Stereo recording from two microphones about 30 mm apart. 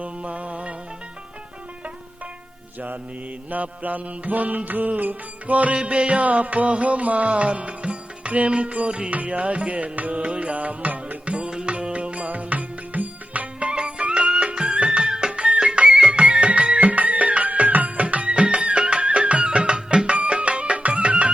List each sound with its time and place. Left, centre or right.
0.0 s music: right
3.5 s music: right
5.7 s music: right
7.3 s music: right
10.2 s music: right
13.7 s music: right
14.5 s music: right
15.5 s music: right
16.1 s music: right
16.9 s music: right
17.4 s music: right
18.3 s music: right